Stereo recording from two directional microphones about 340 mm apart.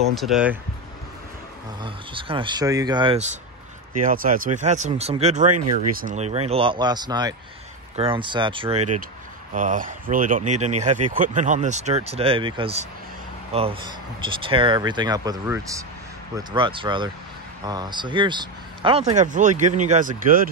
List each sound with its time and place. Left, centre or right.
0.1 s speech: centre
1.8 s speech: centre